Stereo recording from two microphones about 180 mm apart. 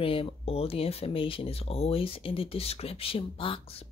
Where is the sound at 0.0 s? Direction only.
30° left (ahead or behind).